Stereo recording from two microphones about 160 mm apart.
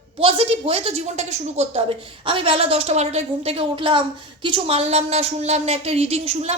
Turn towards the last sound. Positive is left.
turn(degrees=-40)  # may be behind; listen again after turning